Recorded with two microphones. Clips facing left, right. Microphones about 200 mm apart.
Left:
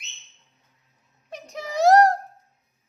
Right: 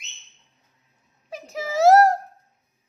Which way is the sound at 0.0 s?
Centre (ahead or behind).